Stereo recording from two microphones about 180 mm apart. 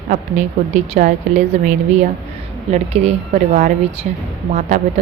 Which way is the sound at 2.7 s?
35° right (ahead or behind).